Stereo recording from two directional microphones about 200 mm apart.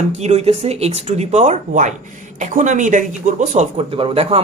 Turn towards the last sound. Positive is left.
turn(degrees=-30)  # may be behind; listen again after turning